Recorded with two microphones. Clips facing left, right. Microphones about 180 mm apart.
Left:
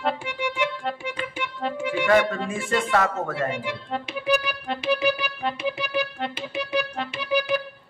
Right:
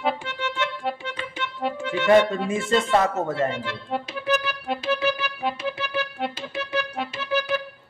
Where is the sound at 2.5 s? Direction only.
20° right (ahead or behind).